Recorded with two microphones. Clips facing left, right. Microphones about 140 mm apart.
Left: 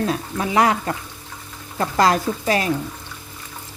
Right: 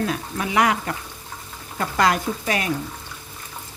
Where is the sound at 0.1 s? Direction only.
30° left (ahead or behind).